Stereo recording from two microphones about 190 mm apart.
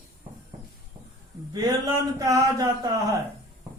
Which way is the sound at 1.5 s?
20° right (ahead or behind).